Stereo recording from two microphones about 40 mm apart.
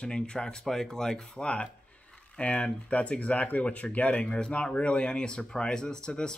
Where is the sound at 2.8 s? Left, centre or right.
Left.